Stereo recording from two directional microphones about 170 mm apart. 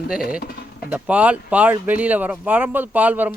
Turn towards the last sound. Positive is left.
turn(degrees=-10)  # may be behind; listen again after turning